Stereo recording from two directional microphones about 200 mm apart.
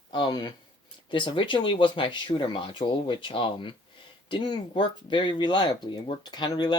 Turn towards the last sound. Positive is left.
turn(degrees=20)  # may be behind; listen again after turning